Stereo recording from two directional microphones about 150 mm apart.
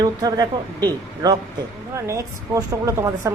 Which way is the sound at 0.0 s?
25° right (ahead or behind).